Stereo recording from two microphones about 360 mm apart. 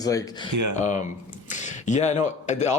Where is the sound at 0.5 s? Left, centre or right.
Right.